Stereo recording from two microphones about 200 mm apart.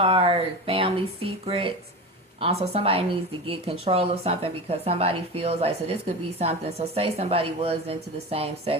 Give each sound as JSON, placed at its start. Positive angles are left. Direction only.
{"t": 0.0, "sound": "speech", "side_deg": -30}